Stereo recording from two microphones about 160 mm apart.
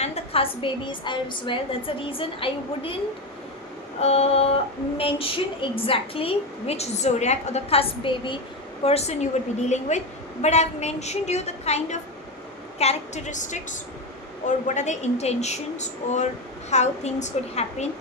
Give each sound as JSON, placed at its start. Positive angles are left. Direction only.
{"t": 0.0, "sound": "a woman's voice", "side_deg": 40}
{"t": 4.0, "sound": "a woman's voice", "side_deg": 40}